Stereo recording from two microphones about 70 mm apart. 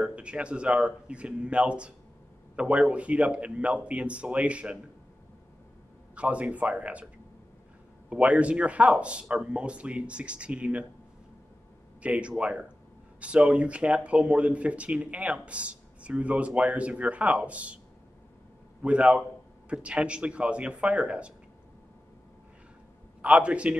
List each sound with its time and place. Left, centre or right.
0.0 s speech: centre
6.1 s speech: centre
8.1 s speech: centre
12.0 s speech: centre
18.8 s speech: centre
23.2 s speech: centre